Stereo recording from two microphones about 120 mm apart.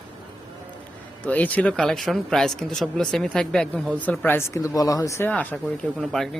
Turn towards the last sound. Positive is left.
turn(degrees=0)  # may be behind; listen again after turning